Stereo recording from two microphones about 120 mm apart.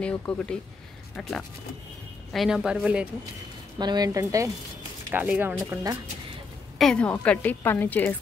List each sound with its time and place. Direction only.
0.2 s a woman's voice: 10° left (ahead or behind)
2.3 s a woman's voice: 5° right (ahead or behind)
3.7 s speech: 35° right (ahead or behind)
5.1 s speech: 15° right (ahead or behind)
5.6 s speech: 25° right (ahead or behind)
6.8 s a woman's voice: 5° left (ahead or behind)